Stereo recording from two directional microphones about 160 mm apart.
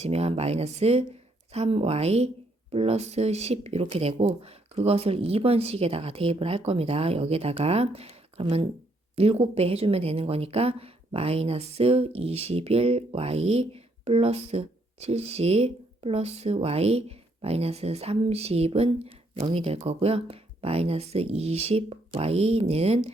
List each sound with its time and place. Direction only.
0.0 s speech: 40° right (ahead or behind)